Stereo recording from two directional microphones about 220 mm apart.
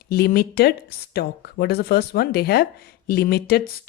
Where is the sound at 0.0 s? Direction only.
45° left (ahead or behind).